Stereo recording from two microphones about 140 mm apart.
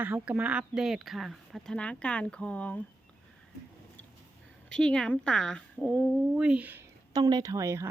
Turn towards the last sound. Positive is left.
turn(degrees=-20)  # may be behind; listen again after turning